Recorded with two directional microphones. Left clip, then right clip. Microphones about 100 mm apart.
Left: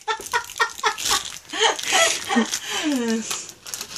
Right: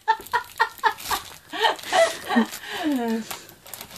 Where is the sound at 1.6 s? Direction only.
15° right (ahead or behind).